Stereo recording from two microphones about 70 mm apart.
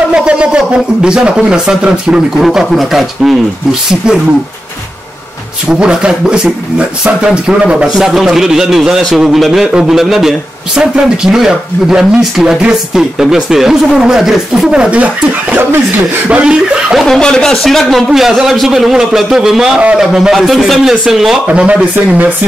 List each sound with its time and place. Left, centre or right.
0.1 s speech: centre
2.4 s a man's voice: centre
5.7 s a man's voice: centre
16.3 s speech: centre
17.0 s a man's voice: centre
21.5 s speech: centre